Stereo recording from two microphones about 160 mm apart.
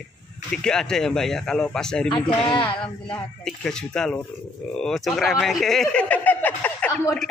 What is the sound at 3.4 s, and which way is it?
Speech, 5° left (ahead or behind).